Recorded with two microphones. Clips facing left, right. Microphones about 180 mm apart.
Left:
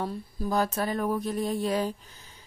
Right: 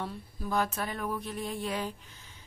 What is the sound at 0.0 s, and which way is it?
A woman's voice, 35° left (ahead or behind).